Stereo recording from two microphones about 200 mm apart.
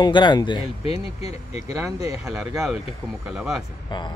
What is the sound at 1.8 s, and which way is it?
Speech, 15° right (ahead or behind).